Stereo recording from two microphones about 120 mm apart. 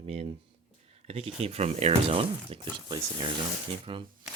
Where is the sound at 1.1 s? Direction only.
55° right (ahead or behind).